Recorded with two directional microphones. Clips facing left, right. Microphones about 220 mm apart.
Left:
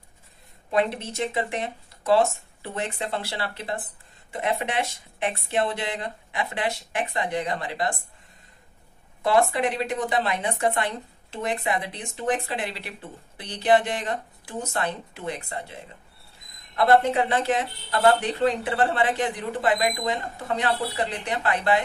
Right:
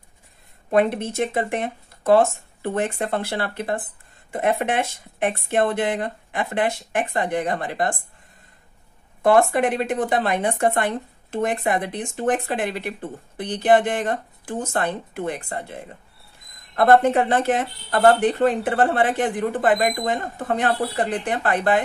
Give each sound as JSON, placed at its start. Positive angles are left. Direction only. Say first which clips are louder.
{"t": 0.7, "sound": "speech", "louder": "right 5 dB", "side_deg": -50}
{"t": 9.2, "sound": "speech", "louder": "right 5 dB", "side_deg": -50}